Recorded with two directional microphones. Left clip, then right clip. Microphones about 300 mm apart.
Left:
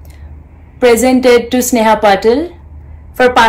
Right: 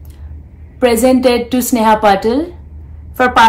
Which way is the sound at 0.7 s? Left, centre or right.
Centre.